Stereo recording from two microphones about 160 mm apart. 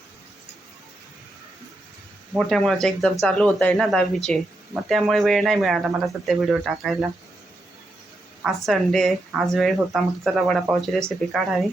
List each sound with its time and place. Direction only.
2.5 s speech: 5° left (ahead or behind)
8.4 s speech: centre (ahead or behind)